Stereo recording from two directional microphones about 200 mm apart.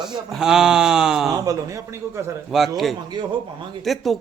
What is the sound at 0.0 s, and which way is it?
Speech, centre (ahead or behind).